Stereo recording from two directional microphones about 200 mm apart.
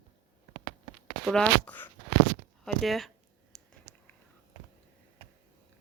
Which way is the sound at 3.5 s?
Centre (ahead or behind).